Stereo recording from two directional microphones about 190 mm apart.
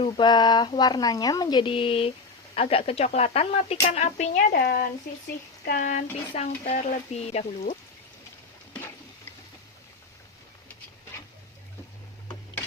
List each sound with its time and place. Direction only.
0.0 s a woman's voice: 25° left (ahead or behind)
4.5 s speech: 50° left (ahead or behind); by 7.8 s 35° left (ahead or behind)